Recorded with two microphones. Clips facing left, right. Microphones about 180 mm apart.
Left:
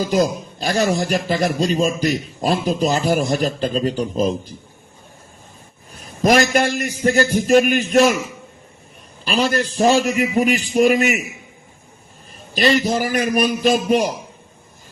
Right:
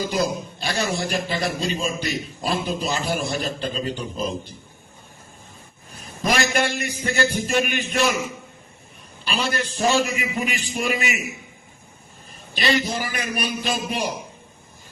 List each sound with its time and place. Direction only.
0.1 s a man's voice: 40° left (ahead or behind)
6.2 s a man's voice: 45° left (ahead or behind)
9.2 s a man's voice: 40° left (ahead or behind)
12.5 s a man's voice: 40° left (ahead or behind)